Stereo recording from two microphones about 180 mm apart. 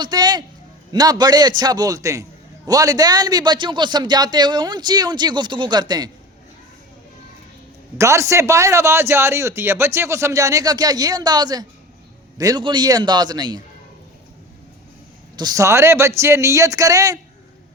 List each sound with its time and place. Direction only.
0.0 s a man's voice: 20° right (ahead or behind)
7.9 s a man's voice: 15° right (ahead or behind)
15.4 s a man's voice: 20° right (ahead or behind)